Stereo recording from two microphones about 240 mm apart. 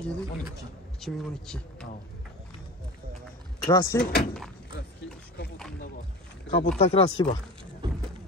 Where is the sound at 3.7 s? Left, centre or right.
Centre.